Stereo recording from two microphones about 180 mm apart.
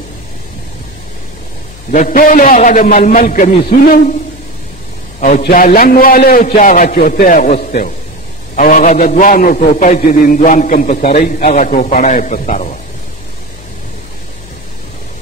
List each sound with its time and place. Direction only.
1.9 s a man's voice: 45° left (ahead or behind)
5.4 s a man's voice: 55° left (ahead or behind)